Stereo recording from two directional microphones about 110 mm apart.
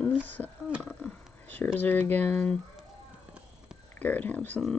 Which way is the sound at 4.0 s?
15° left (ahead or behind).